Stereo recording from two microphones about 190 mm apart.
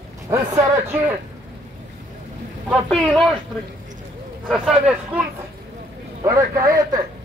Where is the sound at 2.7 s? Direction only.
Centre (ahead or behind).